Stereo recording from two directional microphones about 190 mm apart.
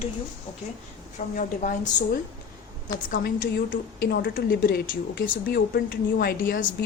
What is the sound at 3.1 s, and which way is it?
A woman's voice, 45° left (ahead or behind).